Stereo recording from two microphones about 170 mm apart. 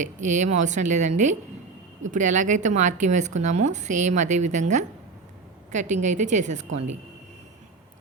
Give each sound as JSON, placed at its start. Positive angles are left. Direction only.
{"t": 0.0, "sound": "a woman's voice", "side_deg": -45}